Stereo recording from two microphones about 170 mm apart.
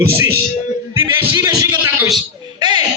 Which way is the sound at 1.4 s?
15° right (ahead or behind).